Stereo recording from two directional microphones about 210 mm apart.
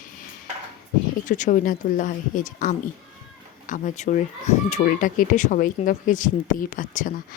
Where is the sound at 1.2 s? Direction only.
40° left (ahead or behind).